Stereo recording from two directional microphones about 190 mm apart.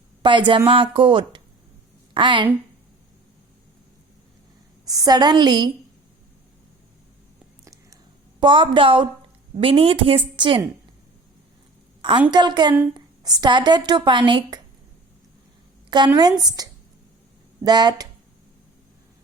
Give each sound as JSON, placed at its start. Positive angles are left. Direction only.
{"t": 0.2, "sound": "a woman's voice", "side_deg": -25}
{"t": 4.9, "sound": "a woman's voice", "side_deg": -20}
{"t": 7.6, "sound": "whispering", "side_deg": -15}
{"t": 8.4, "sound": "a woman's voice", "side_deg": -25}
{"t": 12.3, "sound": "a woman's voice", "side_deg": -20}
{"t": 16.1, "sound": "a woman's voice", "side_deg": -20}